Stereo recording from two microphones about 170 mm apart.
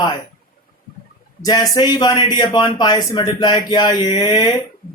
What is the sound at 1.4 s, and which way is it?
Speech, 20° left (ahead or behind).